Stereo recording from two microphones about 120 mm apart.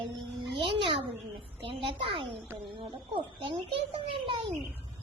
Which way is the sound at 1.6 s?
45° right (ahead or behind).